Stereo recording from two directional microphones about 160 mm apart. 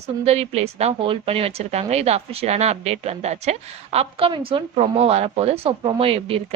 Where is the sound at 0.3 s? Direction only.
40° right (ahead or behind).